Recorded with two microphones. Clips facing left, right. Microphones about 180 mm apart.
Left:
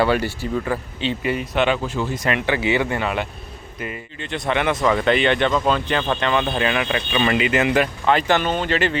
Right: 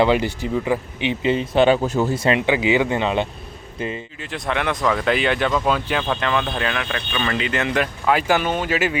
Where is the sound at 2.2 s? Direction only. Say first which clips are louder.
Right 3 dB; 25° right (ahead or behind).